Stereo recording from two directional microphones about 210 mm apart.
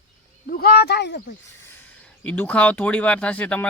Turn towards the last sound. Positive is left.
turn(degrees=5)  # may be behind; listen again after turning